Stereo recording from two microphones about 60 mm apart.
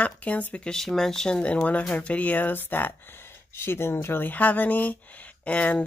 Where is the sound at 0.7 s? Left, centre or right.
Centre.